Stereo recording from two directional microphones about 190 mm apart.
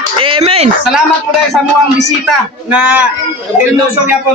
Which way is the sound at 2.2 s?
5° right (ahead or behind).